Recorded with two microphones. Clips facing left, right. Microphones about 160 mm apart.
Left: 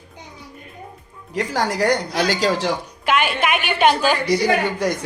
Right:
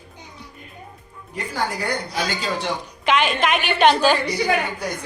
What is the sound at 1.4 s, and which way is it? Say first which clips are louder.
A woman's voice: left 6 dB; 90° left.